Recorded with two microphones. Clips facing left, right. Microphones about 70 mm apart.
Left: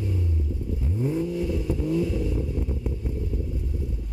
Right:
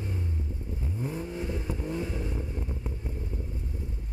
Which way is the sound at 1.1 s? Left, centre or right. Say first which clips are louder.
Left 8 dB; right.